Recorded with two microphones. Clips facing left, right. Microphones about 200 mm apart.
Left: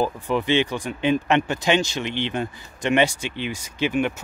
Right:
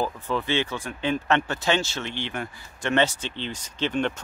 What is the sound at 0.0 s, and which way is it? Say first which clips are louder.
Speech: left 4 dB; 15° left (ahead or behind).